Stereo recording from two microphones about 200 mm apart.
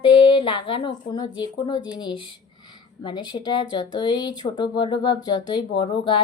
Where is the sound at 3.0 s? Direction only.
20° left (ahead or behind).